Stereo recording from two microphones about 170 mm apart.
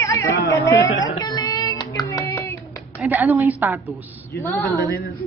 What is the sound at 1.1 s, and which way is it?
Child singing, 25° left (ahead or behind).